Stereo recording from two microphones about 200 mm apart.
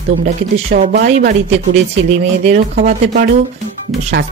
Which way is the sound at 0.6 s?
45° right (ahead or behind).